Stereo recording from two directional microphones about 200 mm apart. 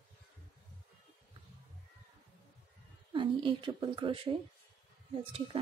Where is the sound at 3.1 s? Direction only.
25° right (ahead or behind).